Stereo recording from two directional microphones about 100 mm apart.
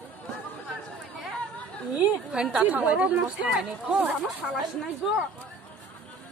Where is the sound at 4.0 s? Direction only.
15° right (ahead or behind).